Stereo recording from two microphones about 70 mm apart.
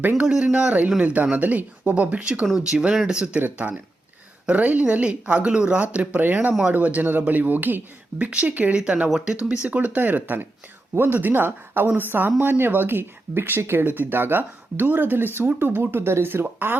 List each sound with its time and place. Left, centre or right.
0.2 s speech: centre
3.4 s speech: right